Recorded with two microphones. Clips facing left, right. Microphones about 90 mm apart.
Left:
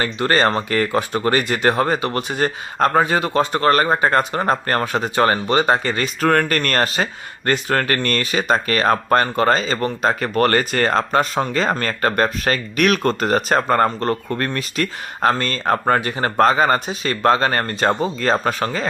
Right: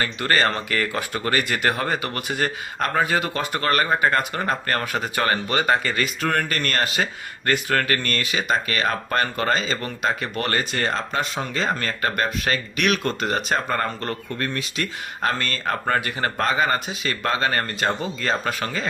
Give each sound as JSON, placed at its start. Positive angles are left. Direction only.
{"t": 0.0, "sound": "speech", "side_deg": 30}
{"t": 6.2, "sound": "speech", "side_deg": 40}
{"t": 9.2, "sound": "speech", "side_deg": 35}
{"t": 15.2, "sound": "speech", "side_deg": 30}